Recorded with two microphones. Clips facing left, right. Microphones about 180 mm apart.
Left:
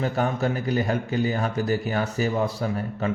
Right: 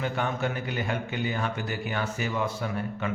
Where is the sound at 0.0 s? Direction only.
40° left (ahead or behind).